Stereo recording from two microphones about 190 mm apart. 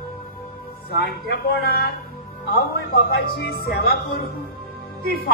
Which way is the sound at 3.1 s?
55° left (ahead or behind).